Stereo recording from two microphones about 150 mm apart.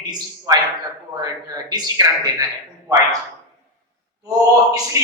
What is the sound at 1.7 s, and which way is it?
Speech, 25° right (ahead or behind).